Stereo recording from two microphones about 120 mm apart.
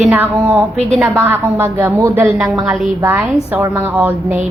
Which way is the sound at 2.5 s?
5° right (ahead or behind).